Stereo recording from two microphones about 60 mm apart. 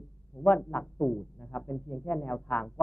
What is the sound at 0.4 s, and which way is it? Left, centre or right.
Speech, left.